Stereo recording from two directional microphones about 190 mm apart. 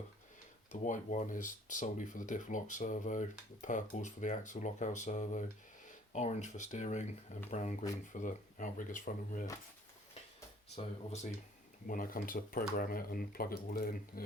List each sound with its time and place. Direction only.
0.7 s speech: 40° left (ahead or behind)
10.8 s speech: 35° left (ahead or behind); by 13.9 s 50° left (ahead or behind)